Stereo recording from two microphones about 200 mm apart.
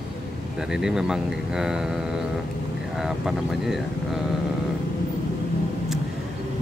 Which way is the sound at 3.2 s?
Centre (ahead or behind).